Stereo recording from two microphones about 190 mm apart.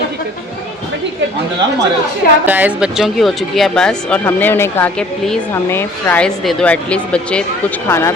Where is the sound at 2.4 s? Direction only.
10° right (ahead or behind).